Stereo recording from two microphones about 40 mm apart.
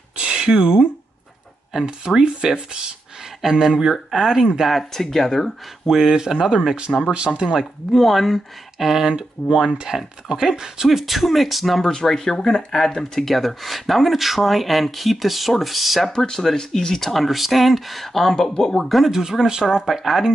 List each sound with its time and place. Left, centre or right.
0.2 s speech: right
1.9 s speech: centre
3.4 s speech: centre
5.0 s speech: centre
5.9 s speech: centre
7.3 s speech: centre
8.7 s speech: centre
9.1 s speech: centre
9.8 s speech: centre
10.9 s speech: centre
16.1 s speech: centre
17.1 s speech: centre
19.0 s speech: centre